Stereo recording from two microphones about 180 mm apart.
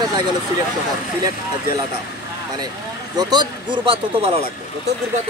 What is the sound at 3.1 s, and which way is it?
Speech, 25° right (ahead or behind).